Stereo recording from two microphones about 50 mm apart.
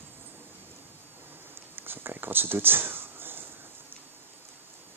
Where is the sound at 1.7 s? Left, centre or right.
Right.